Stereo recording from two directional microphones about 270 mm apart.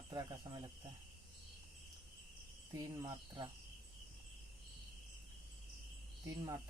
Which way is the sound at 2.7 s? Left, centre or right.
Centre.